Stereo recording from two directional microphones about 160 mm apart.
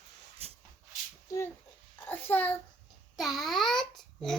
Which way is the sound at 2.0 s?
10° left (ahead or behind).